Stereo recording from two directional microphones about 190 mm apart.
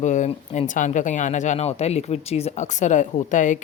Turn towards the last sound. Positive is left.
turn(degrees=40)  # may be behind; listen again after turning